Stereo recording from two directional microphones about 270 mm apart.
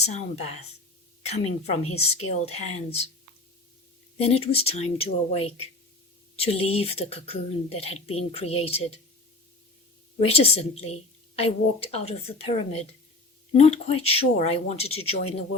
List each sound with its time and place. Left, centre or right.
1.3 s speech: left
4.2 s speech: left
10.2 s speech: left